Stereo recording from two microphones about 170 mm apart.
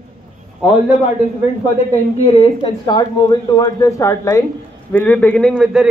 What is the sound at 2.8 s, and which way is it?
A man's voice, 25° left (ahead or behind).